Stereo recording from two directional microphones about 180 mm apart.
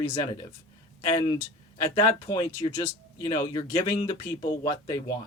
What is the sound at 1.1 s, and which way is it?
Speech, 25° left (ahead or behind).